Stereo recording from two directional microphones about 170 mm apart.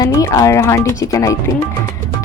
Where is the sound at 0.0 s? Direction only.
20° left (ahead or behind).